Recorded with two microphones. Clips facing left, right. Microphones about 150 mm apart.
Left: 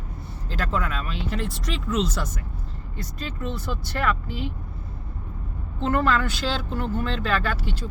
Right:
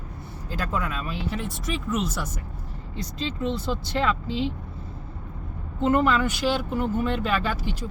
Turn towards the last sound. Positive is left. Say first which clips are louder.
# even
turn(degrees=-15)  # may be behind; listen again after turning